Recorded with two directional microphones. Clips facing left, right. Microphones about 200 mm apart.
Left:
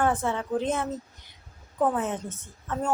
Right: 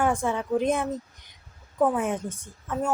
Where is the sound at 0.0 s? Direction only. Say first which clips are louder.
Right 1 dB; 10° right (ahead or behind).